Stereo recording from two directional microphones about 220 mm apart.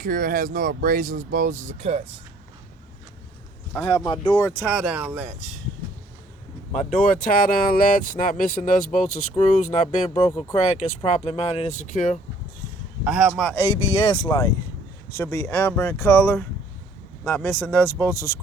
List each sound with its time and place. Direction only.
0.0 s speech: 40° right (ahead or behind)
3.7 s speech: 5° left (ahead or behind)
4.8 s speech: 5° right (ahead or behind)
6.7 s speech: 35° left (ahead or behind)
13.1 s speech: 5° right (ahead or behind)
13.9 s speech: 20° left (ahead or behind)